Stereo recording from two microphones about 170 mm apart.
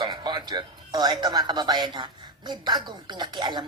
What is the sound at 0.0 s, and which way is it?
Speech, 25° right (ahead or behind).